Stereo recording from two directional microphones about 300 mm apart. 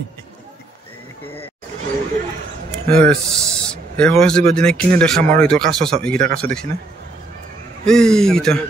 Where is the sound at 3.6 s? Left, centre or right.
Centre.